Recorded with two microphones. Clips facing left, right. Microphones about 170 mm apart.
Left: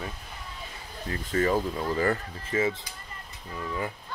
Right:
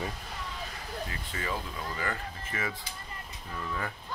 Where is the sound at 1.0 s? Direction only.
45° left (ahead or behind).